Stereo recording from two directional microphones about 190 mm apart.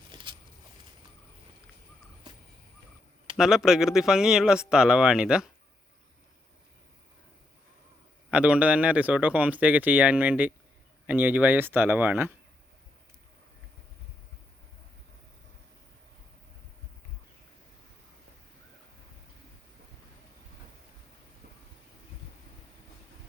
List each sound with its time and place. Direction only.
0.1 s a sound: 25° right (ahead or behind)
3.3 s speech: centre (ahead or behind)
8.3 s a man's voice: 5° right (ahead or behind)